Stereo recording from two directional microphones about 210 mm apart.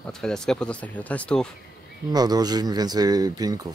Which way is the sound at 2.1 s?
20° right (ahead or behind).